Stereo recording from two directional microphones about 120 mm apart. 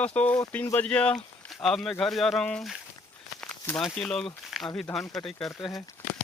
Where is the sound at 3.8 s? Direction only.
5° left (ahead or behind).